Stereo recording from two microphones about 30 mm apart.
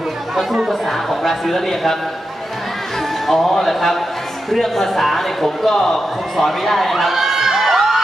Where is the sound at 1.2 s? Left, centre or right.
Centre.